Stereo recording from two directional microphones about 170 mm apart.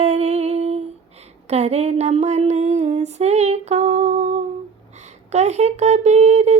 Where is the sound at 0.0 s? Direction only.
40° right (ahead or behind).